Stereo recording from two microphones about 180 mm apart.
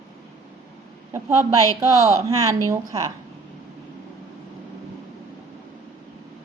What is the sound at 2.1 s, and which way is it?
Speech, 15° right (ahead or behind).